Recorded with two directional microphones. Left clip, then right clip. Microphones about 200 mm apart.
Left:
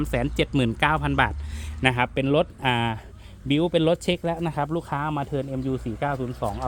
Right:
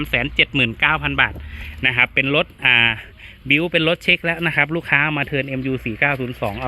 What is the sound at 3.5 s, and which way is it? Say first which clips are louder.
Speech: right 5 dB; 5° left (ahead or behind).